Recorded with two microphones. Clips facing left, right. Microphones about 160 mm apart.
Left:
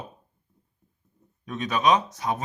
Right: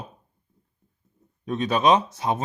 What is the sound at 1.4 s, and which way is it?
Speech, 30° right (ahead or behind).